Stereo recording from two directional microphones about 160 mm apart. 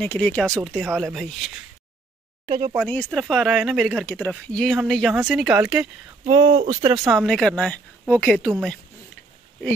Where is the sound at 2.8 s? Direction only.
5° left (ahead or behind).